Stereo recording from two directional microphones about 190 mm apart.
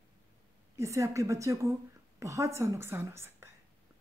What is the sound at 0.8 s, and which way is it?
A woman's voice, 15° right (ahead or behind).